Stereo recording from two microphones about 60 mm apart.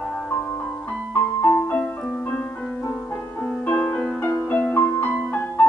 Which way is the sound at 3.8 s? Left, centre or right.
Centre.